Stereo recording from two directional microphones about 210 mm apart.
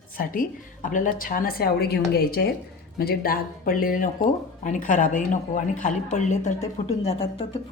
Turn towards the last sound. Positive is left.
turn(degrees=25)  # may be behind; listen again after turning